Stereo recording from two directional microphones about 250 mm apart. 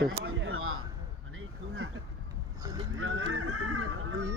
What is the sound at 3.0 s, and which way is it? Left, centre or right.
Fowl, right.